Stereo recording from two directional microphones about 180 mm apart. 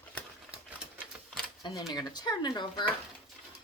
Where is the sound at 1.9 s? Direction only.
20° left (ahead or behind).